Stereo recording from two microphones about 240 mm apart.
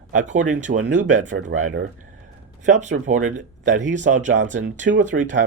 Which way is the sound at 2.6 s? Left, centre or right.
Right.